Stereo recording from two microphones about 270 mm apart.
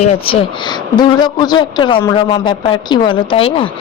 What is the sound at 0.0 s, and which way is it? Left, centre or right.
Speech, left.